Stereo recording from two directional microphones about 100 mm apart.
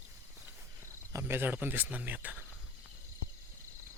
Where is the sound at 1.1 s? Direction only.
20° right (ahead or behind).